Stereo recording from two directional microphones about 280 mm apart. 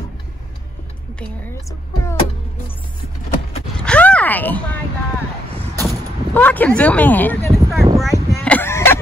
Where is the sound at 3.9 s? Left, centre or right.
Centre.